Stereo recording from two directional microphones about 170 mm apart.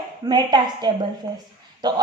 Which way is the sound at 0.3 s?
25° right (ahead or behind).